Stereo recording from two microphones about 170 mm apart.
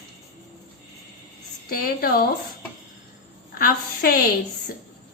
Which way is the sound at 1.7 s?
60° left (ahead or behind).